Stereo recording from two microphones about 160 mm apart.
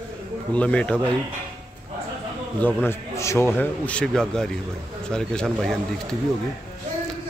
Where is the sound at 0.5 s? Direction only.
10° left (ahead or behind).